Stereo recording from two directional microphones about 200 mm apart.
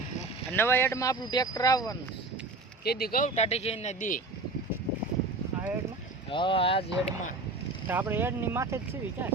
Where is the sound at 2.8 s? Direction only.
50° left (ahead or behind).